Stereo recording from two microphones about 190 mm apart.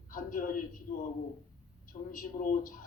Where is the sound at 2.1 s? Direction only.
45° left (ahead or behind).